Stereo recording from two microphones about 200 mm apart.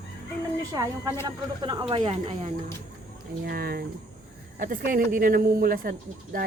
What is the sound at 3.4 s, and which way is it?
Speech, 50° right (ahead or behind).